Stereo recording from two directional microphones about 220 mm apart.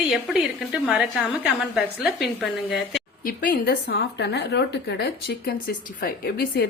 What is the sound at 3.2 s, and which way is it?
Speech, 40° left (ahead or behind).